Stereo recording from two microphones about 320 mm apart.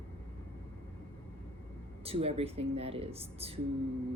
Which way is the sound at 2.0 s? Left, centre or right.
Centre.